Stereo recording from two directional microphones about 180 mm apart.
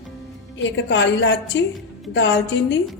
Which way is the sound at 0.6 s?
85° left.